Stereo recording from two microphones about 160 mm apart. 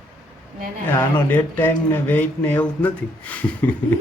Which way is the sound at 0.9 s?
10° left (ahead or behind).